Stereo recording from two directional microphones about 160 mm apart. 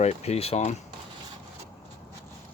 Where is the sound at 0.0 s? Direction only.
40° left (ahead or behind).